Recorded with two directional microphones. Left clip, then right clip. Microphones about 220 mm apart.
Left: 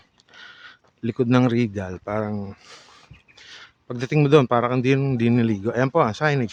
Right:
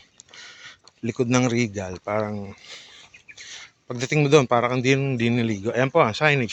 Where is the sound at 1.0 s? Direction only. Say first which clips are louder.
Left 2 dB; 25° left (ahead or behind).